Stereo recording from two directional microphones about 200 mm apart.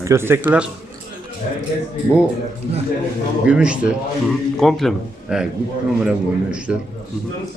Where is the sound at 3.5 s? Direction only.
5° right (ahead or behind).